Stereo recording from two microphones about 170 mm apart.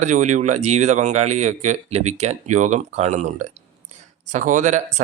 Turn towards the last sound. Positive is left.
turn(degrees=-45)  # may be behind; listen again after turning